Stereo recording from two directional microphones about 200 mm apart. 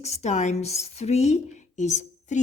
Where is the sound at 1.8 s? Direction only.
35° left (ahead or behind).